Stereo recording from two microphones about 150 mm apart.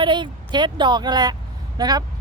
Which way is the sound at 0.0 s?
30° right (ahead or behind).